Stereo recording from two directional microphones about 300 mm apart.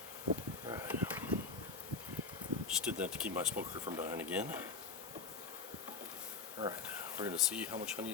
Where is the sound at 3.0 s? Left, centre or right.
Right.